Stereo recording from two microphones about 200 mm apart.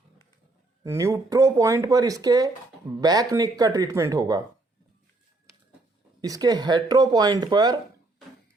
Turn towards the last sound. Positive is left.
turn(degrees=-20)  # may be behind; listen again after turning